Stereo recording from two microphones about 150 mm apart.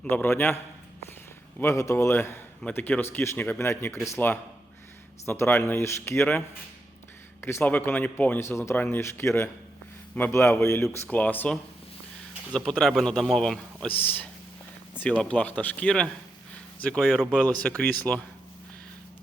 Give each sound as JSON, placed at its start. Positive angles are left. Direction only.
{"t": 0.0, "sound": "a man's voice", "side_deg": 10}
{"t": 7.4, "sound": "a man's voice", "side_deg": 15}
{"t": 12.5, "sound": "a man's voice", "side_deg": 5}
{"t": 14.0, "sound": "a man's voice", "side_deg": 15}